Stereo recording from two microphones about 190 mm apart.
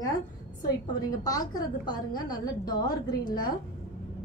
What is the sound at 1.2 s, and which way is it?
A woman's voice, 20° left (ahead or behind).